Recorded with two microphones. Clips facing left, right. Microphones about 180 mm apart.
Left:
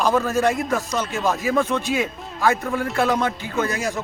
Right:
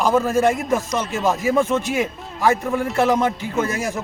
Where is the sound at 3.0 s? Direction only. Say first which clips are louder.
Right 3 dB; 20° right (ahead or behind).